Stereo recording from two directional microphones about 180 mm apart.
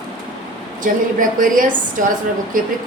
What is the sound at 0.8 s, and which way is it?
A woman's voice, 50° right (ahead or behind).